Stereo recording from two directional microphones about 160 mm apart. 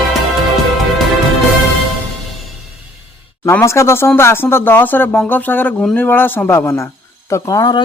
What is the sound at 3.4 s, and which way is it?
Speech, 15° left (ahead or behind).